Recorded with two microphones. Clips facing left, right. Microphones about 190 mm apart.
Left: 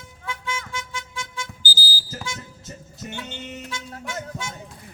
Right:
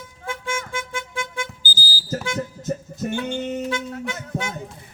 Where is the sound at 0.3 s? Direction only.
50° right (ahead or behind).